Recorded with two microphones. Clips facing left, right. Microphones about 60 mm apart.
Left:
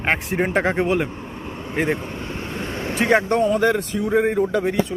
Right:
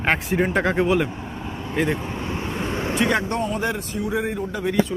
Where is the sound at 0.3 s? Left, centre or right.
Left.